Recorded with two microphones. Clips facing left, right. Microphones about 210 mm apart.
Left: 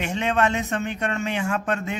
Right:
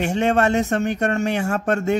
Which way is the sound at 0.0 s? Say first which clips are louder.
Right 5 dB; 40° right (ahead or behind).